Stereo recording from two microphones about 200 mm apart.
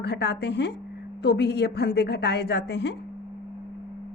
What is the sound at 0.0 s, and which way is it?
A woman's voice, 55° left (ahead or behind).